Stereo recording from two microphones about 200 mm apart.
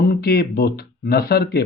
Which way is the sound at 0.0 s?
50° left (ahead or behind).